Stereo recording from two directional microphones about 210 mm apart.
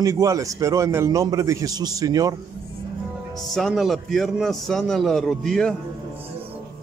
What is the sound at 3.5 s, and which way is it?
A man's voice, centre (ahead or behind).